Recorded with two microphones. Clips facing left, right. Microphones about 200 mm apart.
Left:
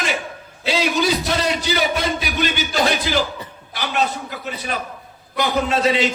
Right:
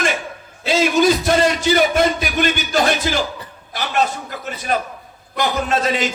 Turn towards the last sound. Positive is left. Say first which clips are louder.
# left 1 dB
turn(degrees=-45)  # may be behind; listen again after turning